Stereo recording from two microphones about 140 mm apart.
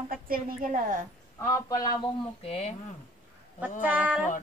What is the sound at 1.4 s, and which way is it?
Speech, 25° left (ahead or behind).